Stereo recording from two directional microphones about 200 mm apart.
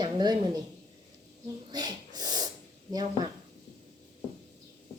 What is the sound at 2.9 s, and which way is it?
Speech, 20° right (ahead or behind).